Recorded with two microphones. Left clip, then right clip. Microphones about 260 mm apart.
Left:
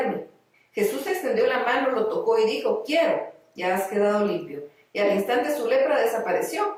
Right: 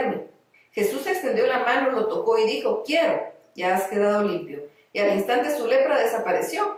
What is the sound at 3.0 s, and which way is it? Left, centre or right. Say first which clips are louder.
Speech: even; centre.